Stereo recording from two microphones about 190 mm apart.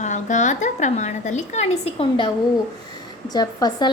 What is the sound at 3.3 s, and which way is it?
Speech, 20° left (ahead or behind).